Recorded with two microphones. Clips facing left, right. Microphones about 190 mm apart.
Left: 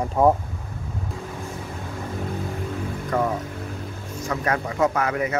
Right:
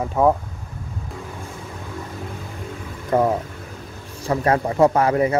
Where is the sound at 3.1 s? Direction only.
30° right (ahead or behind).